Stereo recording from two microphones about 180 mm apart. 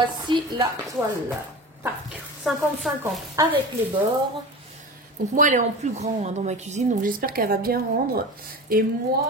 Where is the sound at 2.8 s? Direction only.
Centre (ahead or behind).